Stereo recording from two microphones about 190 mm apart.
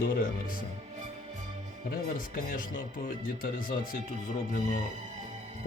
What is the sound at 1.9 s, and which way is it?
Speech, 50° left (ahead or behind).